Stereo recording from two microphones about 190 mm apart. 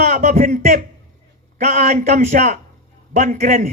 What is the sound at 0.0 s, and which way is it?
A man's voice, 40° right (ahead or behind).